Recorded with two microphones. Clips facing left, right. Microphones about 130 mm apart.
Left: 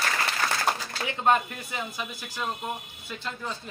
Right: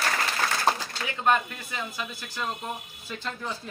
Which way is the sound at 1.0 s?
25° left (ahead or behind).